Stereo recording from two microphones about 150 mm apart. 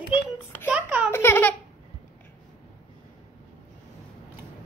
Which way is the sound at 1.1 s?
15° left (ahead or behind).